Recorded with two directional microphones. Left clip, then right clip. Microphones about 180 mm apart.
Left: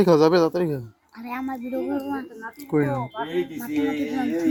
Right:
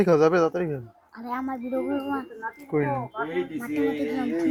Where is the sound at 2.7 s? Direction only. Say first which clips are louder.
Left 3 dB; 25° left (ahead or behind).